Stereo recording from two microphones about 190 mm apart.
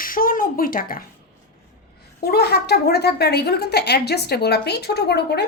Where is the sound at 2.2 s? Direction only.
55° left (ahead or behind).